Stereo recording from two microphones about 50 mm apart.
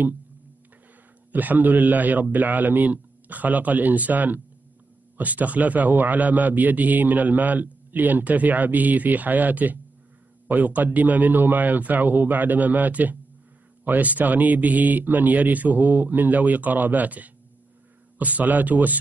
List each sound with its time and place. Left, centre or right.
1.3 s a man's voice: right